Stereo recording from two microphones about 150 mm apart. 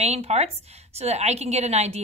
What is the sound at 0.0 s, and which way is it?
A woman's voice, 45° right (ahead or behind).